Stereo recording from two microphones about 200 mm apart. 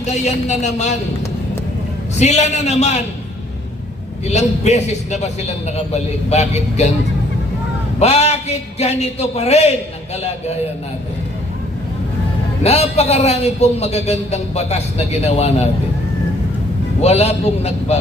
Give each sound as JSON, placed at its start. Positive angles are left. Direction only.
{"t": 0.0, "sound": "a man's voice", "side_deg": 35}
{"t": 2.1, "sound": "a man's voice", "side_deg": 35}
{"t": 4.3, "sound": "a man's voice", "side_deg": 35}
{"t": 7.9, "sound": "a man's voice", "side_deg": 30}
{"t": 12.6, "sound": "a man's voice", "side_deg": 30}
{"t": 17.0, "sound": "a man's voice", "side_deg": 30}